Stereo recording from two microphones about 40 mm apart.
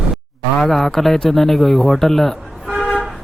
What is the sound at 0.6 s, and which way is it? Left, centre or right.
Speech, centre.